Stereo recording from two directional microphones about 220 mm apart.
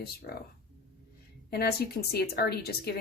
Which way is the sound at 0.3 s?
40° left (ahead or behind).